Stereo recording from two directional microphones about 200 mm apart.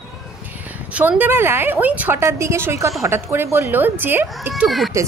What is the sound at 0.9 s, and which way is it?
A woman's voice, 10° right (ahead or behind).